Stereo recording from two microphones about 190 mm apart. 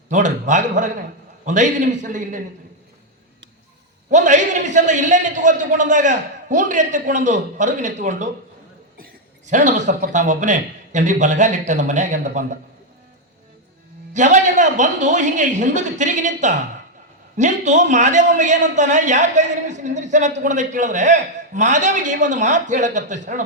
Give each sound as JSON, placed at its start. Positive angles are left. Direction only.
{"t": 0.1, "sound": "a man's voice", "side_deg": -40}
{"t": 4.1, "sound": "a man's voice", "side_deg": -40}
{"t": 9.5, "sound": "a man's voice", "side_deg": -40}
{"t": 14.1, "sound": "a man's voice", "side_deg": -40}